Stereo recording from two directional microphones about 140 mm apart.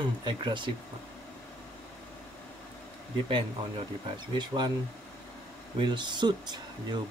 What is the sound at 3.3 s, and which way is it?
Speech, 35° right (ahead or behind).